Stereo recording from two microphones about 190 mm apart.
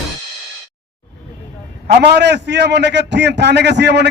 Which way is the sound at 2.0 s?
65° right (ahead or behind).